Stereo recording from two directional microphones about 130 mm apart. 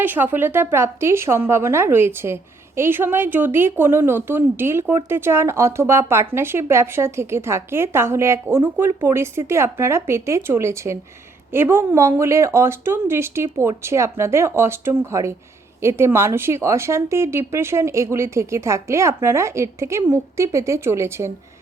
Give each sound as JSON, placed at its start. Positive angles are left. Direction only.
{"t": 0.0, "sound": "a woman's voice", "side_deg": -15}